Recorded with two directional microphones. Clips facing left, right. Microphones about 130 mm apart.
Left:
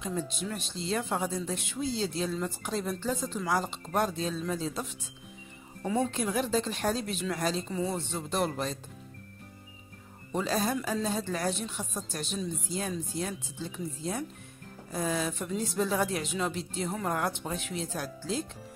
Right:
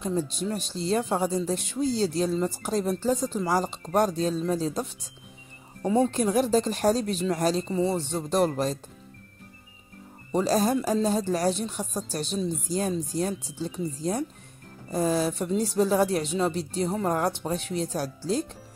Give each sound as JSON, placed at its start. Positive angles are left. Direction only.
{"t": 0.0, "sound": "a woman's voice", "side_deg": -35}
{"t": 6.1, "sound": "a woman's voice", "side_deg": -40}
{"t": 10.3, "sound": "a woman's voice", "side_deg": -40}